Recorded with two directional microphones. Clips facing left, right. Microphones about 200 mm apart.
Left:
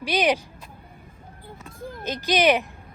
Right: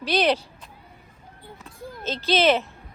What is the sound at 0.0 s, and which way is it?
Speech, 10° left (ahead or behind).